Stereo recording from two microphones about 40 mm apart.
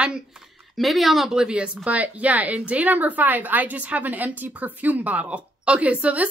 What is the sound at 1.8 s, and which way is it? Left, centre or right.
A woman's voice, right.